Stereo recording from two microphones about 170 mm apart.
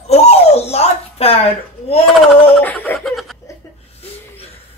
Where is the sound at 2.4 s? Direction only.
10° left (ahead or behind).